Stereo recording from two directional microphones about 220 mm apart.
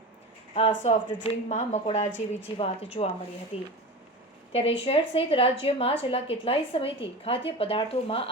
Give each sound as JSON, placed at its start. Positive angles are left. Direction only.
{"t": 0.5, "sound": "a woman's voice", "side_deg": 30}